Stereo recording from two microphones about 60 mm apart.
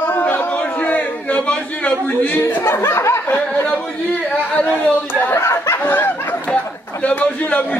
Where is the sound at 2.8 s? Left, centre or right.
Left.